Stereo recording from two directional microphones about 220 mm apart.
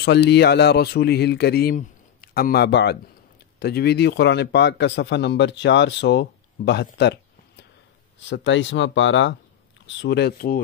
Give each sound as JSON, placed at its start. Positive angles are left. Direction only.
{"t": 0.0, "sound": "speech", "side_deg": 50}
{"t": 8.3, "sound": "speech", "side_deg": 55}